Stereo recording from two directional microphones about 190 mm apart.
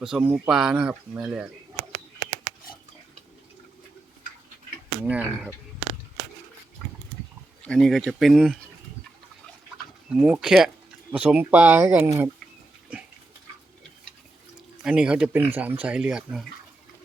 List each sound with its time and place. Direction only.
0.0 s speech: 5° right (ahead or behind)
5.0 s speech: 10° right (ahead or behind)
7.6 s speech: 5° left (ahead or behind)
10.1 s speech: 5° right (ahead or behind)
14.8 s speech: 5° right (ahead or behind)